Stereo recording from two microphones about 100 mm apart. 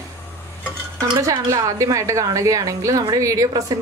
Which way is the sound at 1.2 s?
35° right (ahead or behind).